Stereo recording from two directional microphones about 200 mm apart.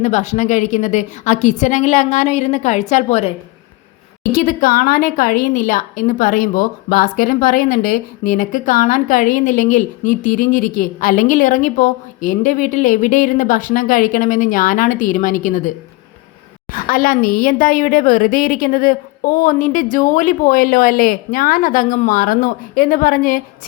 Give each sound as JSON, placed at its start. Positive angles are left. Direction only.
{"t": 0.0, "sound": "a woman's voice", "side_deg": 35}
{"t": 16.7, "sound": "a woman's voice", "side_deg": 45}